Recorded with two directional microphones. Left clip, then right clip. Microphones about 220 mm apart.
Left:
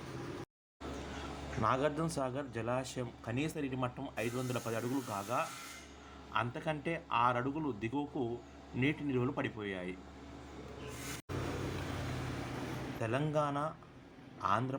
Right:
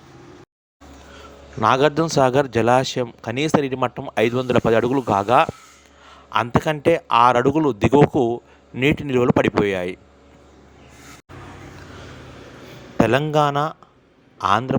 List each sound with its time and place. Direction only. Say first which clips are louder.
1.6 s speech: right 17 dB; 45° right (ahead or behind)
13.0 s a man's voice: right 18 dB; 45° right (ahead or behind)